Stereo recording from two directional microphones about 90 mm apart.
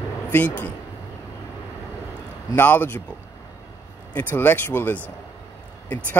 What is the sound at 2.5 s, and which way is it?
Speech, 25° left (ahead or behind).